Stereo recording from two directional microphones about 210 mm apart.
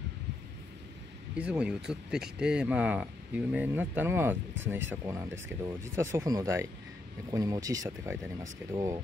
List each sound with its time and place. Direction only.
1.3 s speech: 5° right (ahead or behind)